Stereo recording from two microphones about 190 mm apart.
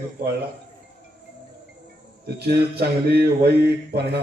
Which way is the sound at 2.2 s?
60° right (ahead or behind).